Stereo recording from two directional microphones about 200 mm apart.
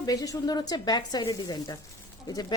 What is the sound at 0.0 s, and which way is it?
A woman's voice, 20° left (ahead or behind).